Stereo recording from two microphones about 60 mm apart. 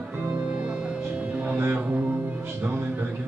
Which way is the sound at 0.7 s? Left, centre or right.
Centre.